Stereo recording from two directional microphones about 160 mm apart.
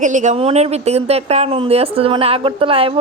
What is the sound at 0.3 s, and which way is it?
Speech, 40° right (ahead or behind).